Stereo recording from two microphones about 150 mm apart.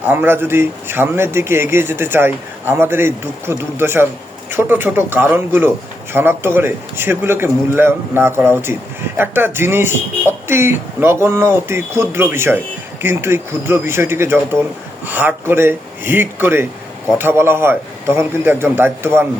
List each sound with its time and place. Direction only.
0.1 s a man's voice: 15° right (ahead or behind)